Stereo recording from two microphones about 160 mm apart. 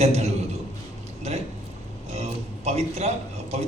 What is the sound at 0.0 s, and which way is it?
Speech, 40° right (ahead or behind).